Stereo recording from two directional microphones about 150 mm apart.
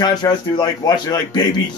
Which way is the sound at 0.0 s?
25° left (ahead or behind).